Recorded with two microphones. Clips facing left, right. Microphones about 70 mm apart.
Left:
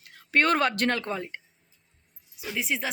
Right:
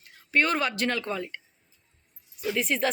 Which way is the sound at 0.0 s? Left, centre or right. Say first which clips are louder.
Left 1 dB; left.